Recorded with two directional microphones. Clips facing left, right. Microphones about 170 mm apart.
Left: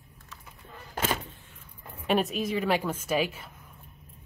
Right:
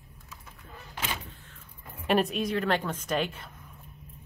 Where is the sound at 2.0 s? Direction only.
Centre (ahead or behind).